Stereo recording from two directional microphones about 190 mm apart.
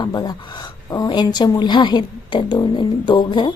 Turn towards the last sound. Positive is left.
turn(degrees=25)  # may be behind; listen again after turning